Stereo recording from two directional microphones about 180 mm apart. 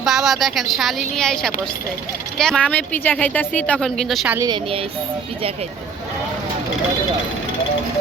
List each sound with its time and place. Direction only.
0.0 s speech: centre (ahead or behind)
4.4 s a woman's voice: 25° right (ahead or behind)